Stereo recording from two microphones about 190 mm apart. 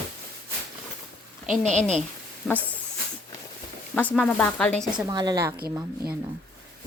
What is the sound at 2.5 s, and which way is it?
Speech, centre (ahead or behind).